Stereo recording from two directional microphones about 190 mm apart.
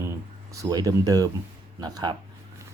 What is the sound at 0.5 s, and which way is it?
Speech, 20° right (ahead or behind).